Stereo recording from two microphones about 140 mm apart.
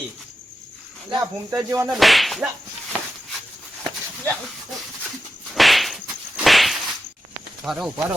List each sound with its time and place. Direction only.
1.2 s speech: 20° right (ahead or behind)
1.9 s whip: centre (ahead or behind)
4.2 s speech: 5° left (ahead or behind)
5.5 s whip: centre (ahead or behind)